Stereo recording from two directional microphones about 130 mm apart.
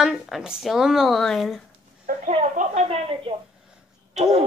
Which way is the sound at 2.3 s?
65° right (ahead or behind).